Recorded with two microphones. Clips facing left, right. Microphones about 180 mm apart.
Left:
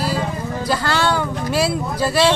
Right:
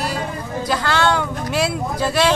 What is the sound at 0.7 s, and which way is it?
Speech, 5° left (ahead or behind).